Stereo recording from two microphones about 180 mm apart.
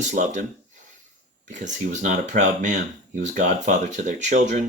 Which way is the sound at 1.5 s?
45° right (ahead or behind).